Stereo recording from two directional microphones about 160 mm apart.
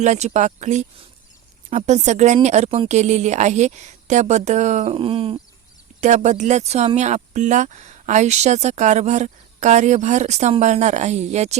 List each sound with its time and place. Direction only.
0.0 s speech: 45° right (ahead or behind)
6.0 s speech: 50° right (ahead or behind)